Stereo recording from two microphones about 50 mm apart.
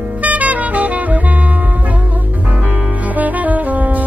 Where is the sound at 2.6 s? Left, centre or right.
Right.